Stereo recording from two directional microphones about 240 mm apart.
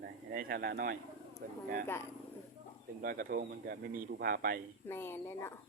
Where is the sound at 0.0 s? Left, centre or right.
Right.